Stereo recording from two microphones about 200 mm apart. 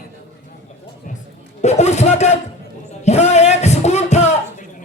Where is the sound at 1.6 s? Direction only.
35° left (ahead or behind).